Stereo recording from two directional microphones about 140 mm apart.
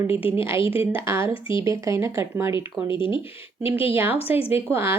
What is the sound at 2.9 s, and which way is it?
Speech, 35° left (ahead or behind).